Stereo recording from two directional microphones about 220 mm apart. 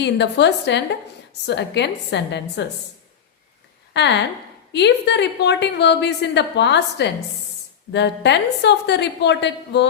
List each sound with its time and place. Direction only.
0.0 s a woman's voice: 50° left (ahead or behind)
3.9 s a woman's voice: 50° left (ahead or behind)